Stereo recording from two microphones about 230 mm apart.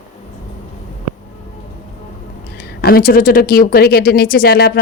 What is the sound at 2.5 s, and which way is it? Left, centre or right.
Speech, left.